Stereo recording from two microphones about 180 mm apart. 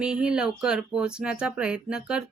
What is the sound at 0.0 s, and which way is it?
A woman's voice, 5° right (ahead or behind).